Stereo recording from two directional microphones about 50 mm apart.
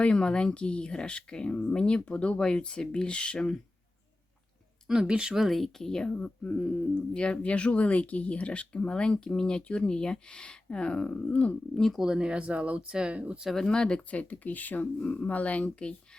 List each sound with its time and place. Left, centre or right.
0.0 s speech: centre
4.9 s speech: centre
5.4 s speech: centre; by 11.5 s left
11.9 s speech: centre
13.7 s speech: centre
14.1 s speech: left